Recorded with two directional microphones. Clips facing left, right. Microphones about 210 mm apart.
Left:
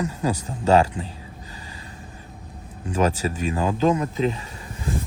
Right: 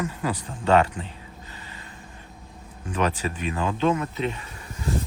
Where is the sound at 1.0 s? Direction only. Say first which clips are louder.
Left 4 dB; 25° left (ahead or behind).